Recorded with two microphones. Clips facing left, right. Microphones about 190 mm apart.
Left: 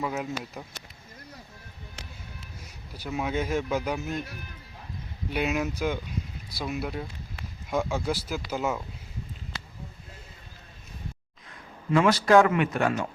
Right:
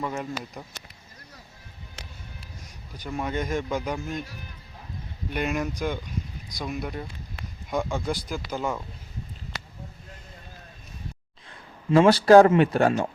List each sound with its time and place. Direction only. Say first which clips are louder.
0.0 s speech: even; 5° left (ahead or behind)
2.9 s speech: even; 5° left (ahead or behind)
5.3 s speech: even; 5° left (ahead or behind)
11.9 s a man's voice: right 5 dB; 30° right (ahead or behind)